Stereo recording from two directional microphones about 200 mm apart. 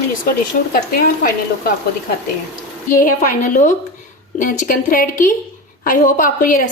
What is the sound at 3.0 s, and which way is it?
Speech, 35° left (ahead or behind).